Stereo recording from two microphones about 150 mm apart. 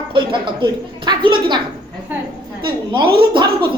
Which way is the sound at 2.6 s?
35° right (ahead or behind).